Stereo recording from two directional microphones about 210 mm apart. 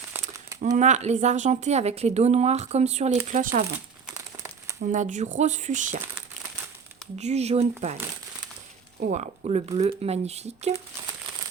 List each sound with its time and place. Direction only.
0.6 s speech: 35° right (ahead or behind)
4.8 s speech: 35° right (ahead or behind)
7.2 s speech: 30° right (ahead or behind)
9.0 s speech: 35° right (ahead or behind)